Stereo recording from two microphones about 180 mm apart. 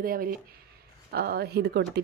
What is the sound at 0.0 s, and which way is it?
Speech, 55° right (ahead or behind).